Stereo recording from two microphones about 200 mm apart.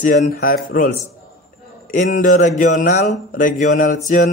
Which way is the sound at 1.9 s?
40° left (ahead or behind).